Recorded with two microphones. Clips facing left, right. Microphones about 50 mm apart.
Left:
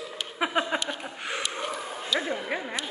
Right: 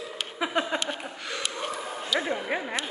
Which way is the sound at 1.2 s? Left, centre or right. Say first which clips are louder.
Left 3 dB; left.